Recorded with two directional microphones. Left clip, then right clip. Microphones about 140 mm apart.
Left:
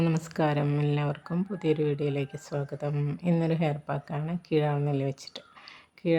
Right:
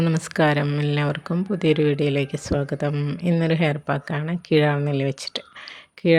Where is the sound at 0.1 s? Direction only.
25° right (ahead or behind).